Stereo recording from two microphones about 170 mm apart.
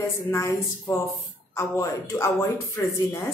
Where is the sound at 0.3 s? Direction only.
15° left (ahead or behind).